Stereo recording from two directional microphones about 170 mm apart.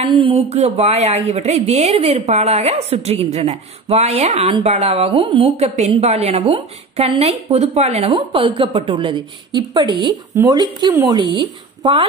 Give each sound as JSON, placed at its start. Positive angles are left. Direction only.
{"t": 0.0, "sound": "a woman's voice", "side_deg": -30}